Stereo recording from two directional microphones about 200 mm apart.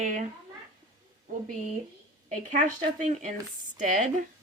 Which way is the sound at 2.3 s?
40° right (ahead or behind).